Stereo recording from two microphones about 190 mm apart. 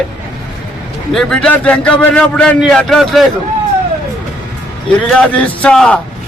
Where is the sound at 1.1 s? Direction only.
5° left (ahead or behind).